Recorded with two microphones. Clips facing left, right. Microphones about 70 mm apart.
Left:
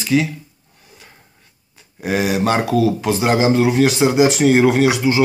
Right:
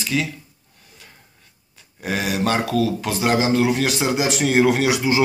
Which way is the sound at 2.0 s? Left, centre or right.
Centre.